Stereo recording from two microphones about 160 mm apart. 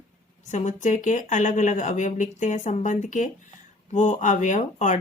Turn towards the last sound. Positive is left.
turn(degrees=50)  # may be behind; listen again after turning